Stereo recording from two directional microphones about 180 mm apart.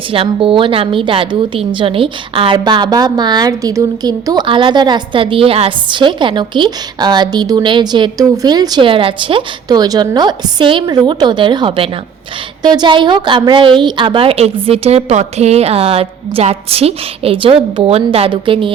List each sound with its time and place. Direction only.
0.1 s a woman's voice: 30° right (ahead or behind)